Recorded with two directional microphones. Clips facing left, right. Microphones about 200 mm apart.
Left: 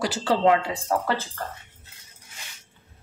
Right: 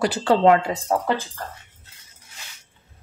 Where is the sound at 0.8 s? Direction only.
20° right (ahead or behind).